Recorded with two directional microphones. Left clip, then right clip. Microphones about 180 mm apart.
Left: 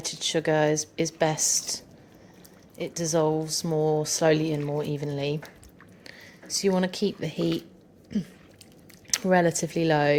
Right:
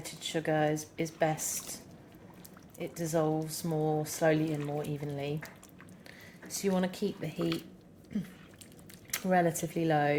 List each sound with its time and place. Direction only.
0.0 s speech: 50° left (ahead or behind)
2.7 s speech: 50° left (ahead or behind)
6.1 s speech: 40° left (ahead or behind)